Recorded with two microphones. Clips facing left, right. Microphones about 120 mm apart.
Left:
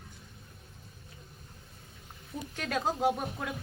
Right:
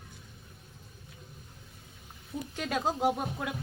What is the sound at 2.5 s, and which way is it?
Speech, 20° right (ahead or behind).